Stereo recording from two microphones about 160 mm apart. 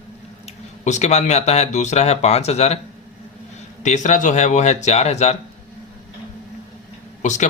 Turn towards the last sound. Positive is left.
turn(degrees=50)  # may be behind; listen again after turning